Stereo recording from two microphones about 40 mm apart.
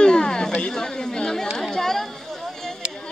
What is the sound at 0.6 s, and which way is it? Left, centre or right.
Chatter, centre.